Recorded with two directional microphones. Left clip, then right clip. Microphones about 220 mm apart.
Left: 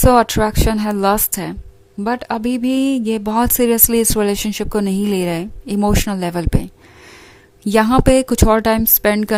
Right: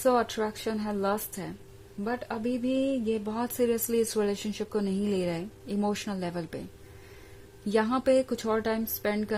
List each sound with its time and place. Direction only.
0.0 s speech: 40° left (ahead or behind)
7.6 s speech: 40° left (ahead or behind)